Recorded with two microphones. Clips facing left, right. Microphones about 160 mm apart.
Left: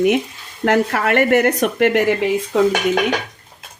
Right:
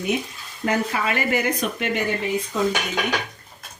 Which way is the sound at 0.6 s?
75° left (ahead or behind).